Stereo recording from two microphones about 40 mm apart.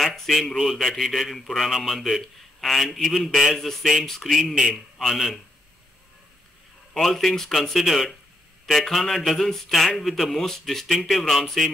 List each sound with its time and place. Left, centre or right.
0.0 s a man's voice: centre
6.9 s a man's voice: centre